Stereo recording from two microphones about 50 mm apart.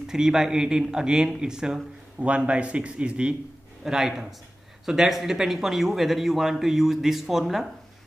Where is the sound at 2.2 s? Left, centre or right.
Right.